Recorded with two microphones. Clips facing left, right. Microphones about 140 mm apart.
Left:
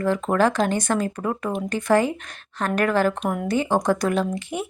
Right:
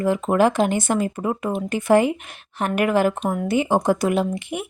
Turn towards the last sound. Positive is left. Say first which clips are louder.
# right 1 dB
turn(degrees=-15)  # may be behind; listen again after turning